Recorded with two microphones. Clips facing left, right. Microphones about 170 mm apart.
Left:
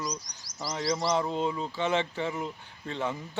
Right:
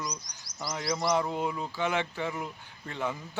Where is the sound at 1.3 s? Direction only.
10° right (ahead or behind).